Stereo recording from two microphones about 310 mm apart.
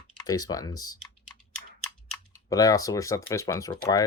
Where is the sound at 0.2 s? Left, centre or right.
Centre.